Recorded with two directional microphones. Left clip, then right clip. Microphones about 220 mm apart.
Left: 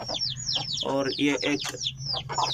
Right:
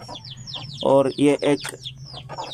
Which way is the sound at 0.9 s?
25° right (ahead or behind).